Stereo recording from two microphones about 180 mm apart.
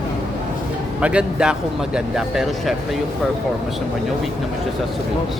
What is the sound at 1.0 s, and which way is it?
Speech, 5° right (ahead or behind).